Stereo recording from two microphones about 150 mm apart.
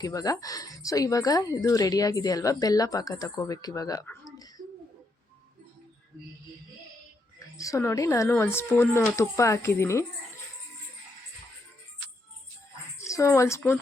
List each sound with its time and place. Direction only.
0.0 s a woman's voice: 25° left (ahead or behind)
4.3 s a sound: 25° left (ahead or behind)
7.5 s a woman's voice: 20° left (ahead or behind)
13.1 s a woman's voice: 20° left (ahead or behind)